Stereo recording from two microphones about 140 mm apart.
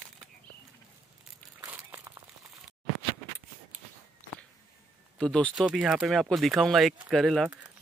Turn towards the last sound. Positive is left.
turn(degrees=0)  # may be behind; listen again after turning